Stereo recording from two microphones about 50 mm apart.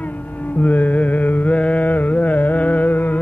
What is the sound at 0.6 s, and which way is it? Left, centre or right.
Mantra, left.